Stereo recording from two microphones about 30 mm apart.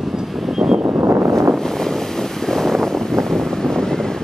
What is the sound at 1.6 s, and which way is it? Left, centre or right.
Wind noise, centre.